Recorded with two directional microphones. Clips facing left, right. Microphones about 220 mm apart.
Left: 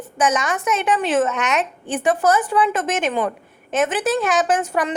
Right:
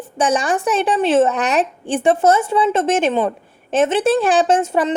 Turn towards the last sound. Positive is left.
turn(degrees=-25)  # may be behind; listen again after turning